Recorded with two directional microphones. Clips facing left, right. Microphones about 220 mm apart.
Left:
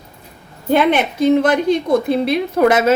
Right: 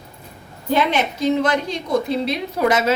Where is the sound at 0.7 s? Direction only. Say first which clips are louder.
Left 5 dB; 55° left (ahead or behind).